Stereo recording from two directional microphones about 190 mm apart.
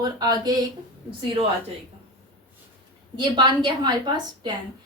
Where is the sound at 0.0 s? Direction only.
20° right (ahead or behind).